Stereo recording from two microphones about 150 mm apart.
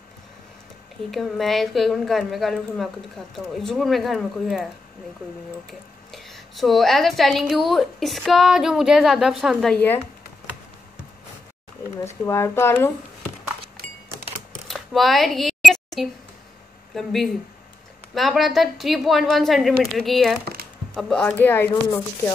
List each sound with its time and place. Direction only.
1.1 s a woman's voice: centre (ahead or behind)
5.7 s a woman's voice: centre (ahead or behind)
12.0 s speech: 20° left (ahead or behind)
14.7 s a sound: centre (ahead or behind)
16.9 s a woman's voice: centre (ahead or behind)